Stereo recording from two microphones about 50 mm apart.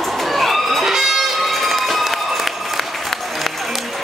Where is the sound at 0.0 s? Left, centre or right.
Centre.